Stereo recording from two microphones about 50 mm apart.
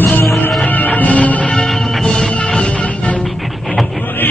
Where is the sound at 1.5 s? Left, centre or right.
Centre; by 3.2 s left.